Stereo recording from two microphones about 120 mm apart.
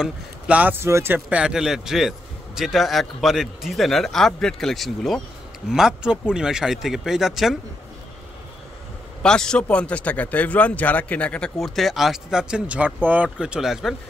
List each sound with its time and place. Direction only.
0.0 s speech: 10° right (ahead or behind)
9.2 s speech: 5° left (ahead or behind)